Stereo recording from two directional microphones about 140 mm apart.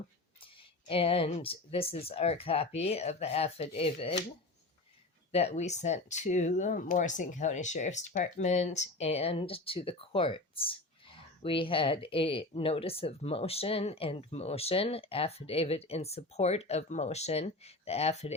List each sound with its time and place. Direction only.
0.9 s speech: 40° left (ahead or behind)
5.3 s speech: 50° left (ahead or behind)